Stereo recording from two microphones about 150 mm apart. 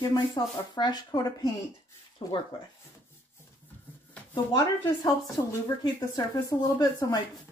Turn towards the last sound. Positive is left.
turn(degrees=25)  # may be behind; listen again after turning